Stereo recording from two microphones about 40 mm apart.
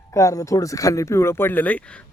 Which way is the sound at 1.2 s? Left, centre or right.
Left.